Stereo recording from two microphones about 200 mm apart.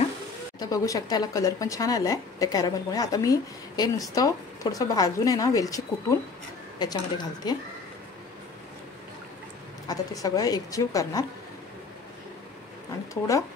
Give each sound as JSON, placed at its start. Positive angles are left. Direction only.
{"t": 0.6, "sound": "speech", "side_deg": 15}
{"t": 9.8, "sound": "speech", "side_deg": 20}